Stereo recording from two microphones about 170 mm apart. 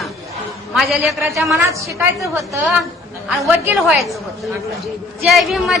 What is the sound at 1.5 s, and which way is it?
A woman's voice, 15° right (ahead or behind).